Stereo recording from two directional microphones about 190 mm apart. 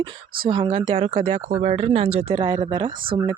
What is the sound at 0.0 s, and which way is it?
Speech, 25° right (ahead or behind).